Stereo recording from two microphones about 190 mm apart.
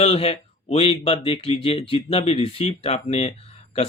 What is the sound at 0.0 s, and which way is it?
Speech, 30° left (ahead or behind).